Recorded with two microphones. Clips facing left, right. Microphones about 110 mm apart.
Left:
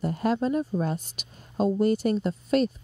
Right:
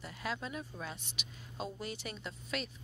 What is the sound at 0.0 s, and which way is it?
Speech, 45° left (ahead or behind).